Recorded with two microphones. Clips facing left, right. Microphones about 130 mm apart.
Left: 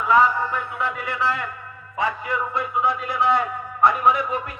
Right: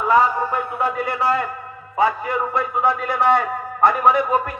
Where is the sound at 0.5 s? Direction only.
40° right (ahead or behind).